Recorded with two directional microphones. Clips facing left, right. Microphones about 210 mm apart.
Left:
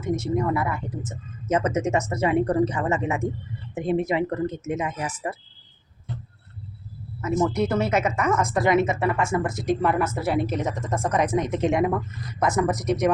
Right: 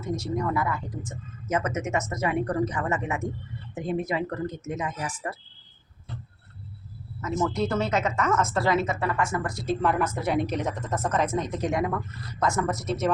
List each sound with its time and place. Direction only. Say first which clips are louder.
0.0 s a woman's voice: left 4 dB; 20° left (ahead or behind)
7.2 s a woman's voice: left 4 dB; 20° left (ahead or behind)